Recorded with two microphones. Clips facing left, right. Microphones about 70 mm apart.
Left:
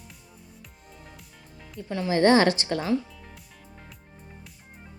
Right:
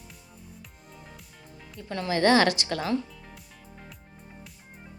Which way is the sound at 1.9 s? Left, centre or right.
Centre.